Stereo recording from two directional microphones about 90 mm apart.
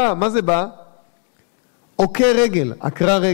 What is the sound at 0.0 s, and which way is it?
Speech, 15° left (ahead or behind).